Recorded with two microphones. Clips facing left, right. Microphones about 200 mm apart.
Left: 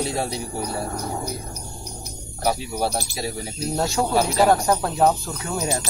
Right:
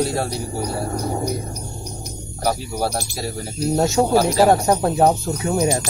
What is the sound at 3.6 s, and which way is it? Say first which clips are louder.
Speech: right 6 dB; 25° right (ahead or behind).